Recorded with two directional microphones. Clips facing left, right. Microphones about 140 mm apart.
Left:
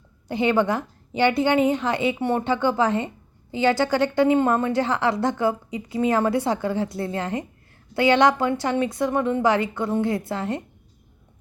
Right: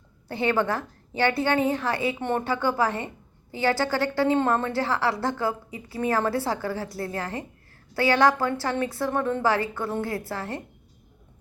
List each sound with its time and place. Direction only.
0.3 s a woman's voice: 15° left (ahead or behind)